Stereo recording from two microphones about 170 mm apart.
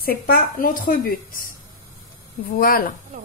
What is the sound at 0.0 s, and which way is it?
A woman's voice, 60° left (ahead or behind).